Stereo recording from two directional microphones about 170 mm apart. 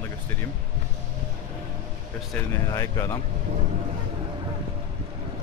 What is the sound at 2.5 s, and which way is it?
Speech, 15° left (ahead or behind).